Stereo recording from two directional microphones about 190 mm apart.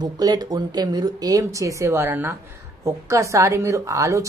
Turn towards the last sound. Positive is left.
turn(degrees=-15)  # may be behind; listen again after turning